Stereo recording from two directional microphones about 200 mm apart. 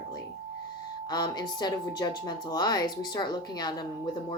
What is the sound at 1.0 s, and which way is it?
Speech, 20° left (ahead or behind).